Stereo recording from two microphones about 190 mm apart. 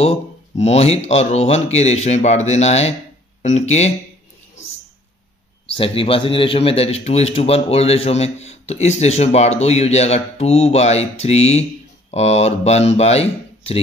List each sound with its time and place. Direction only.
0.0 s a man's voice: 35° left (ahead or behind)
5.7 s a man's voice: 30° left (ahead or behind)